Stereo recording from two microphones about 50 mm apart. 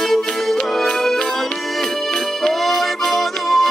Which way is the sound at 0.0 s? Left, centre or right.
Centre.